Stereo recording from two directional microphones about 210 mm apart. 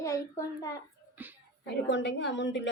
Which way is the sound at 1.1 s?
10° right (ahead or behind).